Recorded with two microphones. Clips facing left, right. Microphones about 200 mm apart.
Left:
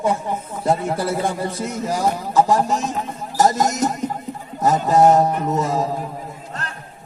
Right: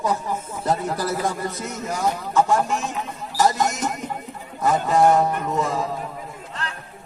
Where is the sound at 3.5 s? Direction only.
40° left (ahead or behind).